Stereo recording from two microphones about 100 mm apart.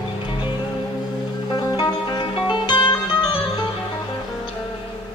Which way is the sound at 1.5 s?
40° left (ahead or behind).